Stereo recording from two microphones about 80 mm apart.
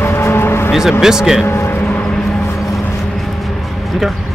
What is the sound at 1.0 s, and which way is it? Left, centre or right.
Speech, centre.